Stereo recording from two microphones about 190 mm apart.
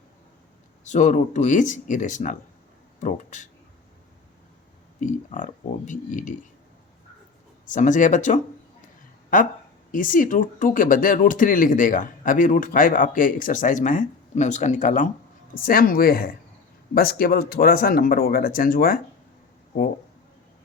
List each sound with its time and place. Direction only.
0.9 s speech: 40° left (ahead or behind)
4.9 s speech: 40° left (ahead or behind)
7.7 s speech: 40° left (ahead or behind)